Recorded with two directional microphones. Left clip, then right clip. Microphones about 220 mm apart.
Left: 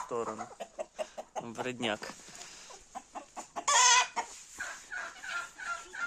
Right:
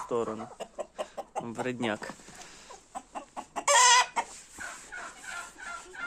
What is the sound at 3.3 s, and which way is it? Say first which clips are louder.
Chicken: right 4 dB; 45° right (ahead or behind).